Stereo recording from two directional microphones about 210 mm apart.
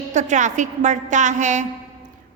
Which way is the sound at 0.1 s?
35° right (ahead or behind).